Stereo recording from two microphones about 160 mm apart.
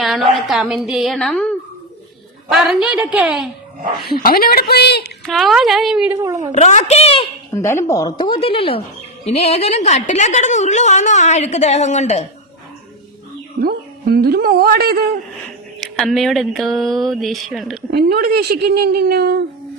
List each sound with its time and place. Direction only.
0.0 s speech: centre (ahead or behind)
4.1 s a woman's voice: 70° left (ahead or behind); by 5.0 s 90° left
5.2 s speech: centre (ahead or behind)
6.2 s a woman's voice: 20° right (ahead or behind)
6.5 s a woman's voice: 50° left (ahead or behind)
7.5 s a woman's voice: 15° left (ahead or behind); by 12.2 s 45° left (ahead or behind)
13.6 s a man's voice: 70° right (ahead or behind)
15.8 s speech: centre (ahead or behind)
17.9 s speech: 80° right